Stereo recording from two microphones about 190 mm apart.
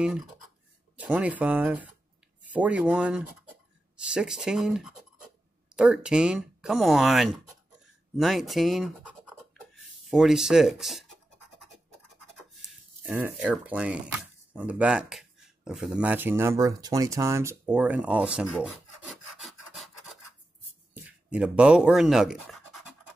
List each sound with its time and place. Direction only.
0.0 s speech: 5° right (ahead or behind)
13.0 s speech: 10° right (ahead or behind)
18.6 s filing: centre (ahead or behind)
20.9 s speech: 5° right (ahead or behind)